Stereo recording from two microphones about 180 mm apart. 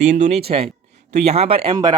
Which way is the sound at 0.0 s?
40° right (ahead or behind).